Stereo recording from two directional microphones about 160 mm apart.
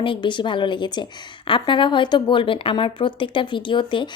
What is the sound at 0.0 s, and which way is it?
Speech, 30° left (ahead or behind).